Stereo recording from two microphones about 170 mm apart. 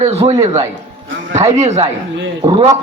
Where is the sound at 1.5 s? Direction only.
40° right (ahead or behind).